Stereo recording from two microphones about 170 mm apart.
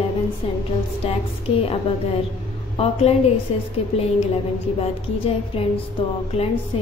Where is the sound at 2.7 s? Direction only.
35° left (ahead or behind).